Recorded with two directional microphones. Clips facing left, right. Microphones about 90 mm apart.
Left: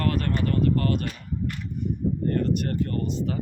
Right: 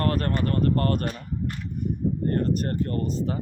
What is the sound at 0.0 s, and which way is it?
Speech, 40° right (ahead or behind).